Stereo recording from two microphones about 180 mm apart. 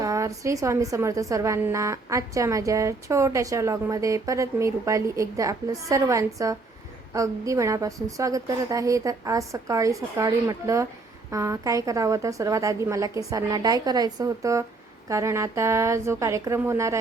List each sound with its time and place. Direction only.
0.0 s a woman's voice: 20° right (ahead or behind)